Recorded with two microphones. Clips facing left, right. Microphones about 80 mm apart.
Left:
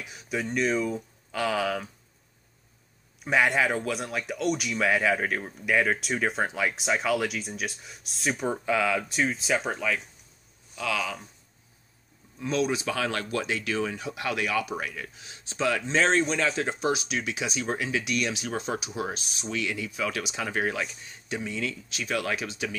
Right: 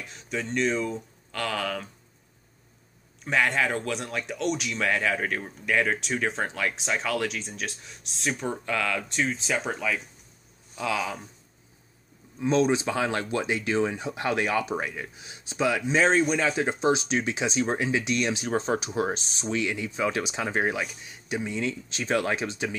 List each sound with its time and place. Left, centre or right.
0.0 s speech: centre
3.3 s speech: centre
10.8 s speech: right
12.4 s speech: right